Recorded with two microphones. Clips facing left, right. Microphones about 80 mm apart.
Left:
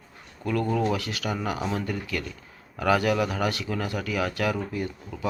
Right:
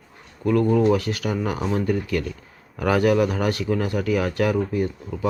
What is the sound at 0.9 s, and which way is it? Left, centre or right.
Speech, right.